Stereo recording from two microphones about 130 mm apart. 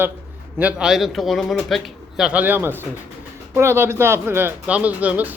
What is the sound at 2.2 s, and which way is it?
A man's voice, 10° right (ahead or behind).